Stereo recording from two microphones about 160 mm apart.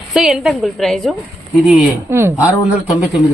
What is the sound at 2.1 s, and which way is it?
Speech, 15° right (ahead or behind).